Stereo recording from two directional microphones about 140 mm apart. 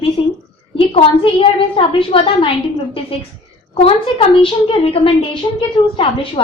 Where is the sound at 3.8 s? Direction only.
40° left (ahead or behind).